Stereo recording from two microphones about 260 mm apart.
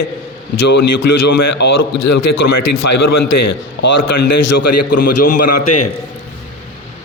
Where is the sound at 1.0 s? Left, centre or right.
Left.